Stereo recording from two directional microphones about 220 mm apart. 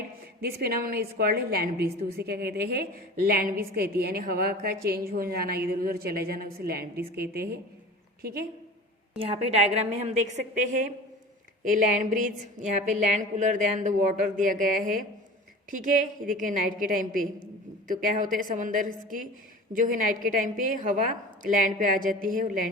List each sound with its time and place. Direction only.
0.4 s a woman's voice: 45° right (ahead or behind)
9.3 s a woman's voice: 30° right (ahead or behind)
11.6 s a woman's voice: 35° right (ahead or behind)